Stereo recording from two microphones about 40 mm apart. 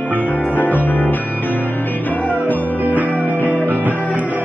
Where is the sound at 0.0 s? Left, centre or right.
Left.